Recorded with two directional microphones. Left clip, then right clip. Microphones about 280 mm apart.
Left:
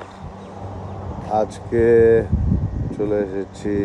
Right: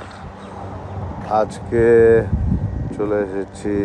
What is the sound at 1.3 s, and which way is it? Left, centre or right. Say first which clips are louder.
Speech: right 2 dB; centre.